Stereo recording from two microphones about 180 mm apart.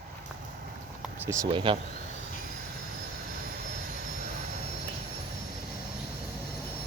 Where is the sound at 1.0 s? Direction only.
15° right (ahead or behind).